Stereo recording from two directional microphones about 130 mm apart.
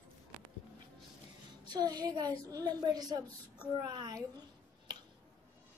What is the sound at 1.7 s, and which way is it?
A woman's voice, 30° right (ahead or behind).